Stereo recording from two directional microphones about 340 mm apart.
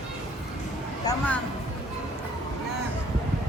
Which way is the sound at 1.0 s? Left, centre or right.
Centre.